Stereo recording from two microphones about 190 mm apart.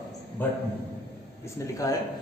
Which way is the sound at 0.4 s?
10° left (ahead or behind).